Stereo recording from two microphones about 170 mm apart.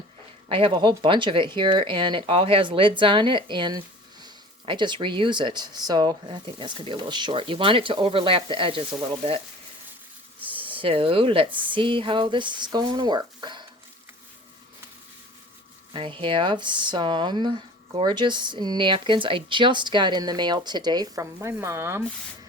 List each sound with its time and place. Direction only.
0.4 s speech: 30° right (ahead or behind)
10.7 s speech: 30° right (ahead or behind)
15.9 s speech: 30° right (ahead or behind); by 22.0 s 15° right (ahead or behind)